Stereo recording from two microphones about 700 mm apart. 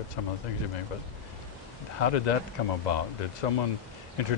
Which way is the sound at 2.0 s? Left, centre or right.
Left.